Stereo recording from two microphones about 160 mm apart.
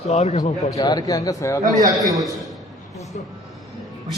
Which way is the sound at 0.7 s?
25° left (ahead or behind).